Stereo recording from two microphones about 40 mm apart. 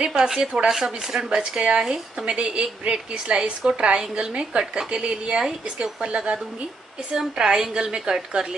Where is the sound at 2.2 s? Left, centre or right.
Right.